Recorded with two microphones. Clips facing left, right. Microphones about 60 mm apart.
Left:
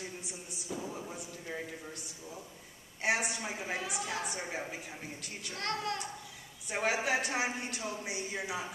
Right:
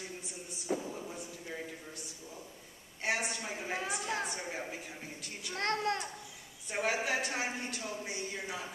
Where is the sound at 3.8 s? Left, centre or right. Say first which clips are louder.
Right 1 dB; right.